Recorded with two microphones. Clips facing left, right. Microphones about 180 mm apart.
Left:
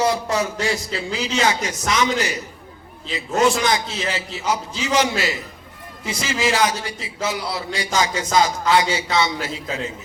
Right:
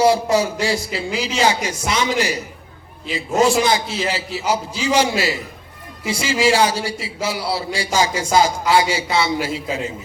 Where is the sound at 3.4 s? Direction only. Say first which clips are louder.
Right 2 dB; 30° right (ahead or behind).